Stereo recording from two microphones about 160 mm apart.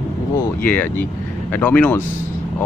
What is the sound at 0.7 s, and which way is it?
Speech, 10° left (ahead or behind).